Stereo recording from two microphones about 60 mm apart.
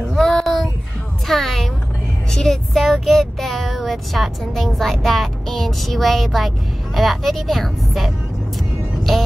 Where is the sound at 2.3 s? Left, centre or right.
Centre.